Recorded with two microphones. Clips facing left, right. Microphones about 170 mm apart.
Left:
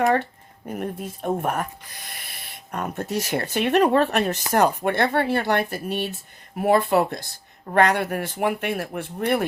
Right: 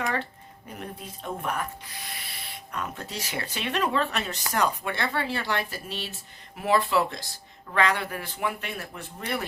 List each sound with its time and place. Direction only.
0.0 s speech: 50° left (ahead or behind)